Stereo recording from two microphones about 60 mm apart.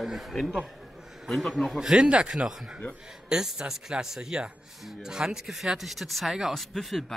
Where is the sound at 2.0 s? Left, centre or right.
Centre.